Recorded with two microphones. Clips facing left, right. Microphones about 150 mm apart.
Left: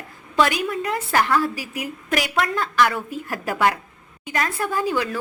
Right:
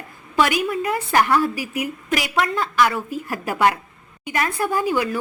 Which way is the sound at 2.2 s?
Centre (ahead or behind).